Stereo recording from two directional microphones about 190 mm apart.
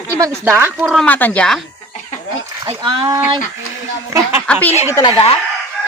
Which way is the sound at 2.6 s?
25° right (ahead or behind).